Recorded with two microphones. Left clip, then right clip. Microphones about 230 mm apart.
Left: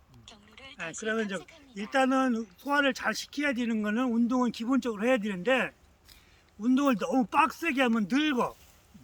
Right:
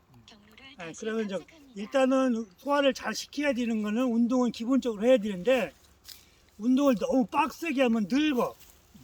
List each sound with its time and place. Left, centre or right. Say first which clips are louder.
0.3 s a sound: left 2 dB; left
0.8 s a man's voice: left 2 dB; centre
1.4 s speech: right 3 dB; left
1.7 s a man's voice: right 1 dB; centre